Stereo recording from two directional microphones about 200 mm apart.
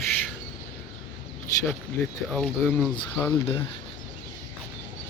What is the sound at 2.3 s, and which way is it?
Speech, 5° left (ahead or behind).